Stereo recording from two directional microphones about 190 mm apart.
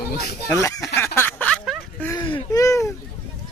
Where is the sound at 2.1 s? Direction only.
25° left (ahead or behind).